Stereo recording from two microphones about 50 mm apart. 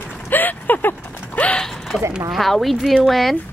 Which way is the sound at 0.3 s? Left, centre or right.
Left.